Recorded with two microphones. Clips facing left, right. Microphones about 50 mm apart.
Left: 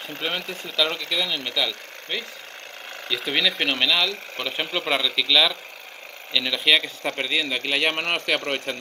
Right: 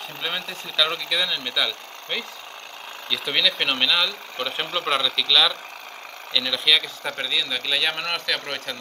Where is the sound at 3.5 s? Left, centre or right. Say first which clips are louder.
Even; centre.